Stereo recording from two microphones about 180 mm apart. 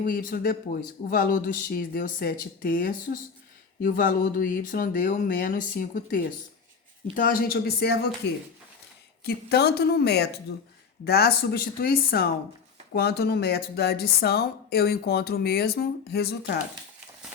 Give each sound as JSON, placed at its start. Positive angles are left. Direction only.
{"t": 0.0, "sound": "speech", "side_deg": 50}
{"t": 9.2, "sound": "speech", "side_deg": 65}